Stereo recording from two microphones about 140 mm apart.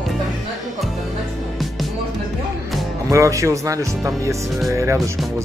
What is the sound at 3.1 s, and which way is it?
Speech, 20° right (ahead or behind).